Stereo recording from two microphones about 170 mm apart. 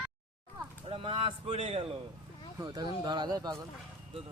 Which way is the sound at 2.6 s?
25° right (ahead or behind).